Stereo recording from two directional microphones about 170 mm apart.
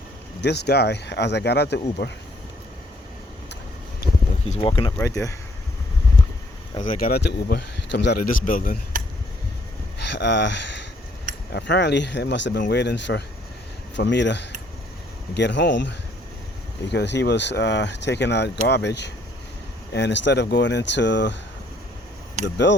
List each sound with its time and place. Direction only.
0.4 s speech: 80° left
4.5 s speech: 30° left (ahead or behind)
4.9 s speech: 15° left (ahead or behind)
6.8 s speech: 60° left (ahead or behind)
10.0 s speech: 90° left
22.4 s speech: 90° left